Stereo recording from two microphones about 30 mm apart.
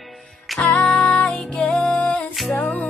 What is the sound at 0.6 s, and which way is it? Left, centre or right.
Music, left.